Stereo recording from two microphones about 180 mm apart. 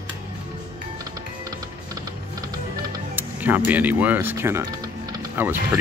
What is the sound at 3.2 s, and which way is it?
Speech, 10° right (ahead or behind).